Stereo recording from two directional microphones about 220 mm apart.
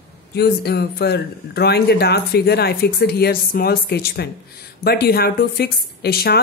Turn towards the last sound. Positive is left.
turn(degrees=45)  # may be behind; listen again after turning